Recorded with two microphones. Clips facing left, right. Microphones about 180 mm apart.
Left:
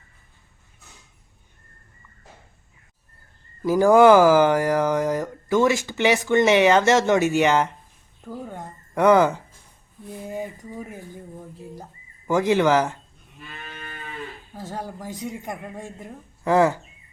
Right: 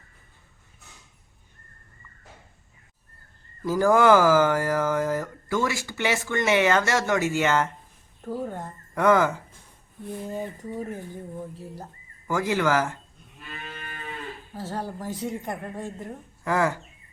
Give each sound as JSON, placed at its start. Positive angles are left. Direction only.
{"t": 3.6, "sound": "speech", "side_deg": 15}
{"t": 8.5, "sound": "a sound", "side_deg": 15}
{"t": 10.3, "sound": "speech", "side_deg": 10}
{"t": 12.3, "sound": "speech", "side_deg": 20}
{"t": 14.6, "sound": "speech", "side_deg": 15}